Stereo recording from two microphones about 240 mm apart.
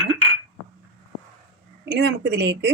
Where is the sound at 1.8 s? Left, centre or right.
Right.